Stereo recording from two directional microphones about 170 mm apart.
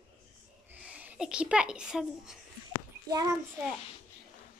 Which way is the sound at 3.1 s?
20° right (ahead or behind).